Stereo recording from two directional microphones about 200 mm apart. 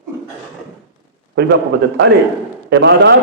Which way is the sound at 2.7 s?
60° right (ahead or behind).